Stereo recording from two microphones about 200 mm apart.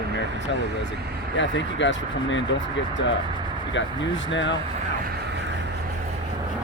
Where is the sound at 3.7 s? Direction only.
65° left (ahead or behind).